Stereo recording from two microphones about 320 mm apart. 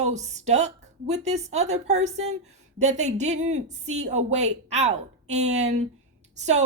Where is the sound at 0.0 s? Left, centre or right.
Right.